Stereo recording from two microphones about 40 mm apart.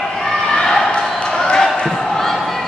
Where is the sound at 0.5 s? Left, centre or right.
Centre.